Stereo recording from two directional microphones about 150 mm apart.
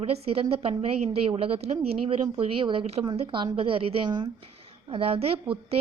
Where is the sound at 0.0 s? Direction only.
40° right (ahead or behind).